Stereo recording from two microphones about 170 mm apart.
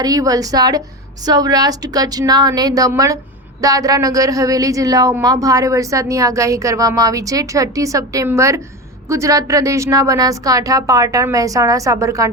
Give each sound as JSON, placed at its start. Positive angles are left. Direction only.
{"t": 0.0, "sound": "a woman's voice", "side_deg": -20}